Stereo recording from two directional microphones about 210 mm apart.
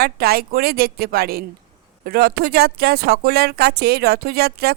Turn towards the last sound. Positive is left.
turn(degrees=-50)  # may be behind; listen again after turning